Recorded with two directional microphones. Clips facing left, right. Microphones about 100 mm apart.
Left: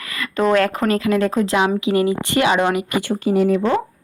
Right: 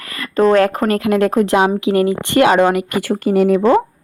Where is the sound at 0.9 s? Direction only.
60° right (ahead or behind).